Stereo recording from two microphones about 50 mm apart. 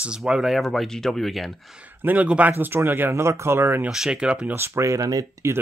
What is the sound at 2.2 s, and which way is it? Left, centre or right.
Speech, right.